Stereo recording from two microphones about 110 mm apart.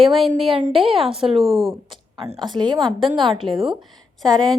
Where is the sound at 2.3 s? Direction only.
40° right (ahead or behind).